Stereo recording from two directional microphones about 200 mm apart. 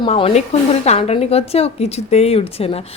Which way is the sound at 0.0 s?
25° left (ahead or behind).